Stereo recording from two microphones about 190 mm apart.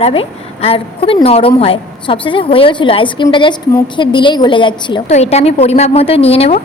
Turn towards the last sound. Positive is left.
turn(degrees=30)  # may be behind; listen again after turning